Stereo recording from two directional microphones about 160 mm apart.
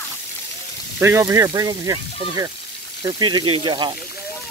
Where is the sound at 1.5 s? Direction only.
25° right (ahead or behind).